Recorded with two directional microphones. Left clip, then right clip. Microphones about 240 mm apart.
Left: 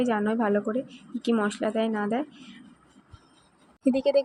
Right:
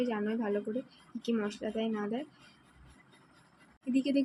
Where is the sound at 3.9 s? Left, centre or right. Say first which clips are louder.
Left 7 dB; left.